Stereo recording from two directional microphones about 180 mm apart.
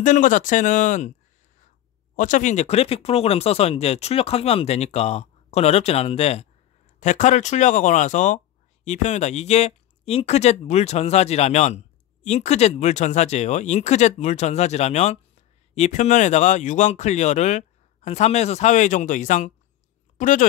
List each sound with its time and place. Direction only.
0.0 s speech: 45° left (ahead or behind)
2.1 s speech: 45° left (ahead or behind)